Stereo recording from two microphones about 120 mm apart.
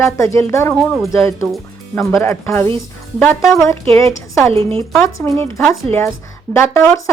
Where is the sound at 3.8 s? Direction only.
55° right (ahead or behind).